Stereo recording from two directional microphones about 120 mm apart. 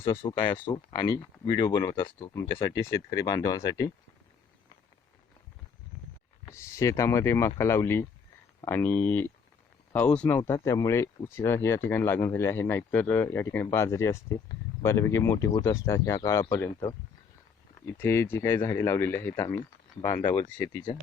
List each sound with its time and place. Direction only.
0.0 s speech: 45° left (ahead or behind)
0.3 s speech: 20° left (ahead or behind)
0.6 s speech: 35° left (ahead or behind)
2.3 s speech: 25° left (ahead or behind)
6.5 s speech: 25° left (ahead or behind)
17.8 s speech: 20° left (ahead or behind)
20.2 s speech: 40° left (ahead or behind)